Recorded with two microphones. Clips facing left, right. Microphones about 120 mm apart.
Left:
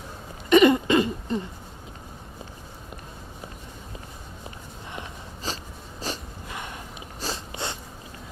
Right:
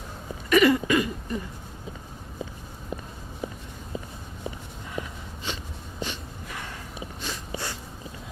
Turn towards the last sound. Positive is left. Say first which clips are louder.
# left 2 dB
turn(degrees=25)  # may be behind; listen again after turning